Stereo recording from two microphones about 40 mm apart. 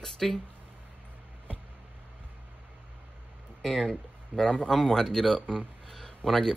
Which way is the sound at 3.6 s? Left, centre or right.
Centre.